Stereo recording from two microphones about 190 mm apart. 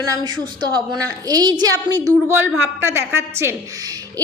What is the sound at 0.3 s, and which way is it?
A woman's voice, 25° right (ahead or behind).